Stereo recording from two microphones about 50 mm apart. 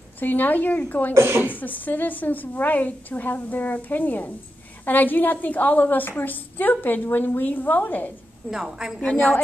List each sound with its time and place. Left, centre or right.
0.2 s a woman's voice: left
1.1 s a woman's voice: right
1.5 s a woman's voice: left
8.5 s a woman's voice: centre